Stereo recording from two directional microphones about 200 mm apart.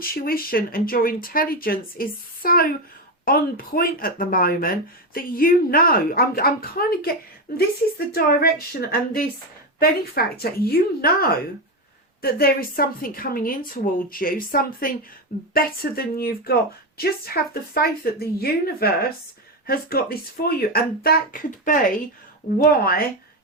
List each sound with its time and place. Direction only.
0.0 s speech: 45° left (ahead or behind)